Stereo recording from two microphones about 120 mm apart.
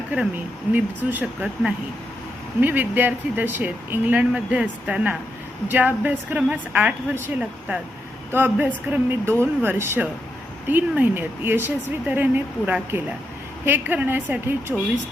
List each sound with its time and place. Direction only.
0.7 s speech: 15° right (ahead or behind)